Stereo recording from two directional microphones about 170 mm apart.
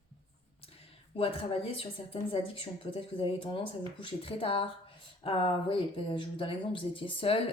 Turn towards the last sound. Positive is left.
turn(degrees=35)  # may be behind; listen again after turning